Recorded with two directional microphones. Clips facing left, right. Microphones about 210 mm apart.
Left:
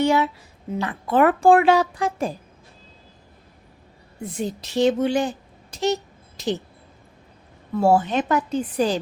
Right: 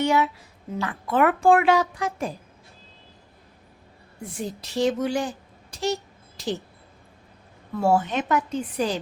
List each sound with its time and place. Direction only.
0.0 s speech: 30° left (ahead or behind)
4.4 s speech: 20° left (ahead or behind)
5.7 s a sound: 20° left (ahead or behind)
7.8 s speech: 30° left (ahead or behind)